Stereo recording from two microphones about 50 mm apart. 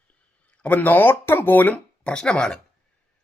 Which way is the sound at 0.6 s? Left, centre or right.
Left.